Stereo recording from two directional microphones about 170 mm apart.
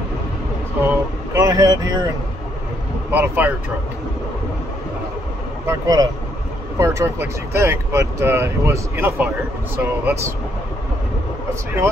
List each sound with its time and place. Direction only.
0.8 s vehicle: 20° right (ahead or behind)
3.1 s speech: 10° right (ahead or behind)
5.7 s speech: 20° right (ahead or behind)